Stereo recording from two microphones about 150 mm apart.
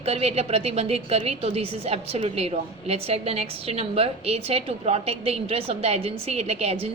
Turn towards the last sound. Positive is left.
turn(degrees=-45)  # may be behind; listen again after turning